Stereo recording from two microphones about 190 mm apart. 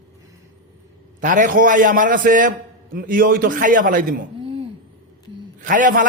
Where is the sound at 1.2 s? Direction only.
45° right (ahead or behind).